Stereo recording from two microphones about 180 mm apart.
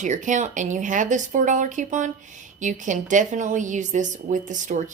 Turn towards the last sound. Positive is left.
turn(degrees=-45)  # may be behind; listen again after turning